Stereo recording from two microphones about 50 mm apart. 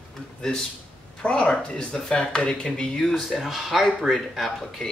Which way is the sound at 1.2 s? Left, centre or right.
Left.